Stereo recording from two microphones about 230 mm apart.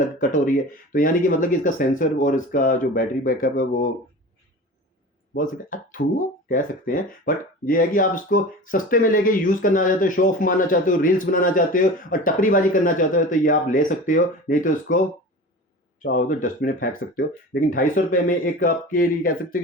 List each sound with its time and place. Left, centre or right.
0.2 s speech: left
5.3 s speech: left
16.0 s speech: left